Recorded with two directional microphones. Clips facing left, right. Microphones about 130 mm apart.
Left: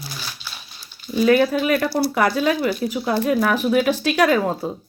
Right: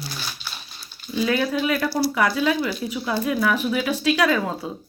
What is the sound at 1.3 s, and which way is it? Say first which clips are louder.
Speech: left 6 dB; 50° left (ahead or behind).